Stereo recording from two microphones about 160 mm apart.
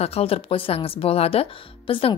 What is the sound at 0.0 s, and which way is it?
Speech, 40° left (ahead or behind).